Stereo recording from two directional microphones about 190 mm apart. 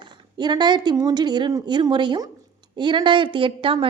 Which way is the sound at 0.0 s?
20° right (ahead or behind).